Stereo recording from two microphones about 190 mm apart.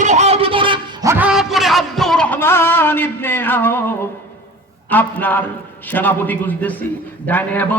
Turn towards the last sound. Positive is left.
turn(degrees=10)  # may be behind; listen again after turning